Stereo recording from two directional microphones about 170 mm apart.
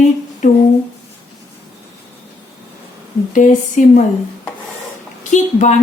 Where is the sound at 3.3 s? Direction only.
45° left (ahead or behind).